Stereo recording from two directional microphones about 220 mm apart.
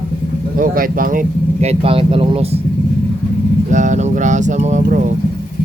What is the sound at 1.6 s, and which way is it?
Speech, 25° right (ahead or behind).